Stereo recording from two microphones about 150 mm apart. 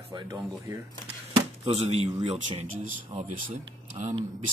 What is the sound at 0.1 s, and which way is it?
Speech, 30° right (ahead or behind).